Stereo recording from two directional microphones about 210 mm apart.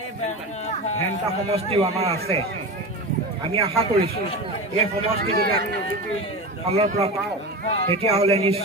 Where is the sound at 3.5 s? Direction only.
30° right (ahead or behind).